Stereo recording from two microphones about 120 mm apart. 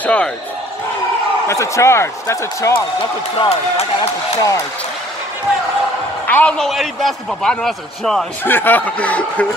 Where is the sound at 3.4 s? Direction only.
60° left (ahead or behind).